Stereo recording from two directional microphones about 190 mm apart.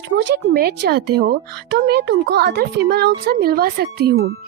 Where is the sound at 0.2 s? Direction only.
60° right (ahead or behind).